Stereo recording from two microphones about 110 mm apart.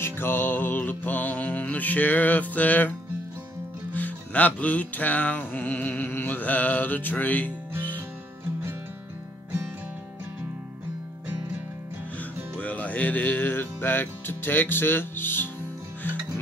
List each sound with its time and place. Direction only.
0.0 s music: 20° left (ahead or behind)
3.9 s music: 15° left (ahead or behind)
12.2 s music: 15° left (ahead or behind)